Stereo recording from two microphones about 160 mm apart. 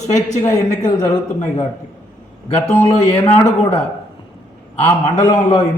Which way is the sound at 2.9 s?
45° left (ahead or behind).